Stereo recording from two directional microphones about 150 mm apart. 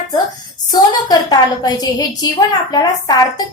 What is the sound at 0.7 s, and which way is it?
A woman's voice, 25° left (ahead or behind).